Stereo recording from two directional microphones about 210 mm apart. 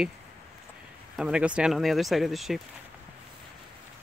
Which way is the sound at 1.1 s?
5° right (ahead or behind).